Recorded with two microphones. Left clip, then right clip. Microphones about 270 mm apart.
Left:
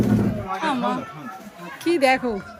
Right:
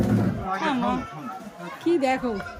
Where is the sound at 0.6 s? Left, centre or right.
Centre.